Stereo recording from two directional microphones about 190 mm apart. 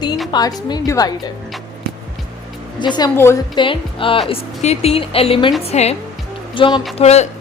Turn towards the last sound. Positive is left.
turn(degrees=35)  # may be behind; listen again after turning